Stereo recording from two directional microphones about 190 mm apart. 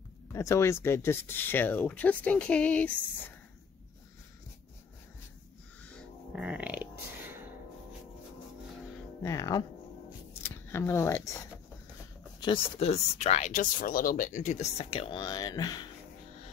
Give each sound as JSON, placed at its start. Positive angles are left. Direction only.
{"t": 0.3, "sound": "speech", "side_deg": 15}
{"t": 6.3, "sound": "music", "side_deg": -5}
{"t": 9.2, "sound": "speech", "side_deg": 20}
{"t": 12.4, "sound": "speech", "side_deg": 30}